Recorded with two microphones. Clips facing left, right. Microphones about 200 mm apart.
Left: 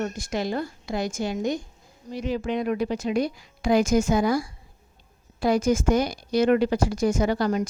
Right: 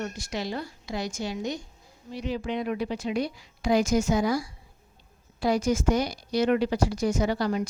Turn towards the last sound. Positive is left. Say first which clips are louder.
# left 3 dB
turn(degrees=45)  # may be behind; listen again after turning